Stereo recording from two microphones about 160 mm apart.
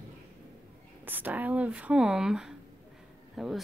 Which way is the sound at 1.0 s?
10° right (ahead or behind).